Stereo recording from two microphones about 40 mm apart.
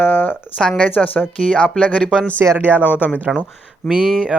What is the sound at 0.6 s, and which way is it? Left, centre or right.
Speech, centre.